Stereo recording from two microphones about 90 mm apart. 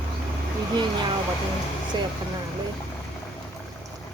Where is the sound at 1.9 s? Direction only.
55° right (ahead or behind).